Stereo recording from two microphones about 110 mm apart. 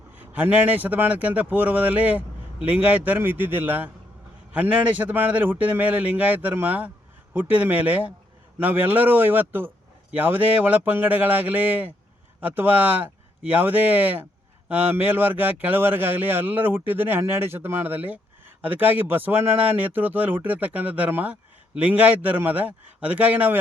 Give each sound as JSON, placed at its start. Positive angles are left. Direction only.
{"t": 0.2, "sound": "speech", "side_deg": -15}